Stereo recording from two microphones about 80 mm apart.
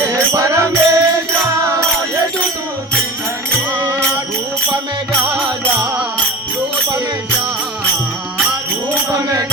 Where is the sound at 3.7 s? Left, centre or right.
Right.